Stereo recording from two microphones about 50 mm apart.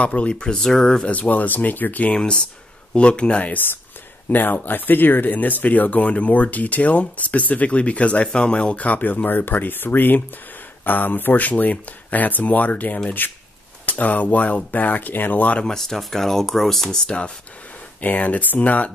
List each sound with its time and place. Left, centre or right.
0.0 s speech: left
1.1 s speech: left
2.1 s speech: centre
4.3 s speech: left
15.6 s speech: centre
17.0 s speech: left
18.0 s speech: left